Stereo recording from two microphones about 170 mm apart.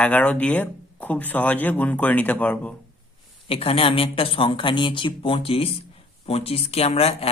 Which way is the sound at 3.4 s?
35° left (ahead or behind).